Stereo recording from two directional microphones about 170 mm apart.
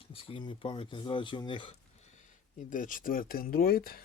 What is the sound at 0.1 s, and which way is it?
Speech, 35° left (ahead or behind).